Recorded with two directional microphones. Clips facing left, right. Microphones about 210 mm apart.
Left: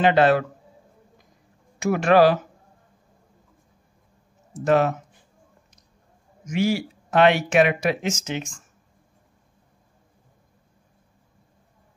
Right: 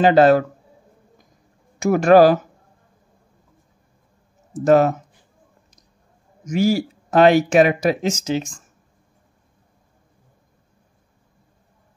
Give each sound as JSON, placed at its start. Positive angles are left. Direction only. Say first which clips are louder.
{"t": 0.0, "sound": "speech", "louder": "right 5 dB", "side_deg": -40}
{"t": 1.8, "sound": "speech", "louder": "right 5 dB", "side_deg": -45}
{"t": 4.6, "sound": "speech", "louder": "right 5 dB", "side_deg": -40}
{"t": 6.4, "sound": "speech", "louder": "right 4 dB", "side_deg": -40}